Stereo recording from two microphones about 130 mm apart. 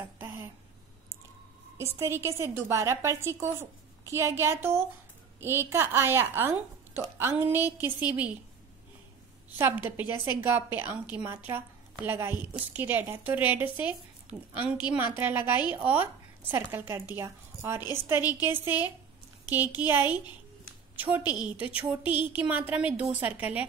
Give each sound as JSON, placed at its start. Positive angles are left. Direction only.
{"t": 0.2, "sound": "a sound", "side_deg": -15}
{"t": 1.8, "sound": "a woman's voice", "side_deg": -20}
{"t": 9.6, "sound": "a woman's voice", "side_deg": -15}
{"t": 14.3, "sound": "a woman's voice", "side_deg": -25}
{"t": 14.9, "sound": "a woman's voice", "side_deg": -15}
{"t": 21.3, "sound": "a woman's voice", "side_deg": -10}